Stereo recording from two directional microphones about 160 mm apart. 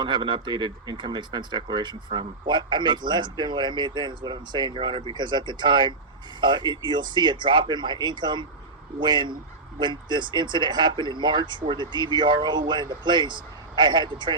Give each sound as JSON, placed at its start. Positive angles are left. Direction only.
{"t": 0.0, "sound": "speech", "side_deg": -30}